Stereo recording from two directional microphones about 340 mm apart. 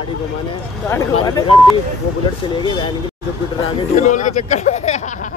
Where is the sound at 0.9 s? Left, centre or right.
Centre.